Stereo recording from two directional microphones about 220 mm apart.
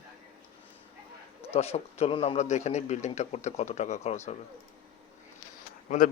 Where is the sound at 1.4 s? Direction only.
30° left (ahead or behind).